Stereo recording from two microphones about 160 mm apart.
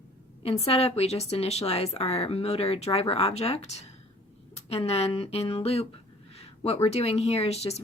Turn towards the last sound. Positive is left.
turn(degrees=40)  # may be behind; listen again after turning